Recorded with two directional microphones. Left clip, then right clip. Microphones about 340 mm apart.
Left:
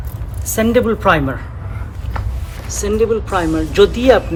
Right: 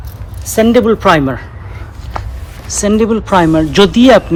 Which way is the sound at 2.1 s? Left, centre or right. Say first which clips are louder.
Right 5 dB; centre.